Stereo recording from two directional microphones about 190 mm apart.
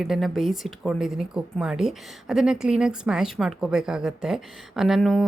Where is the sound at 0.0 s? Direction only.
Centre (ahead or behind).